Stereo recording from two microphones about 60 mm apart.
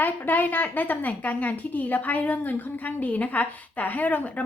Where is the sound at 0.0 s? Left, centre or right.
Left.